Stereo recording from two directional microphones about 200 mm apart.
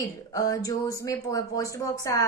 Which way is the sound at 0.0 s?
15° left (ahead or behind).